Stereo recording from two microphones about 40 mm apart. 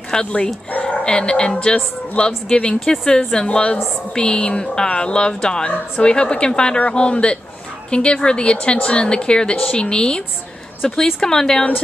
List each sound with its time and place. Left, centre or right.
0.1 s a woman's voice: left
2.8 s a woman's voice: centre
3.4 s a woman's voice: left